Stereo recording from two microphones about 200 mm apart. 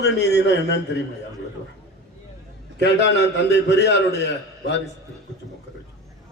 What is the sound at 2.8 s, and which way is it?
A man's voice, 60° left (ahead or behind).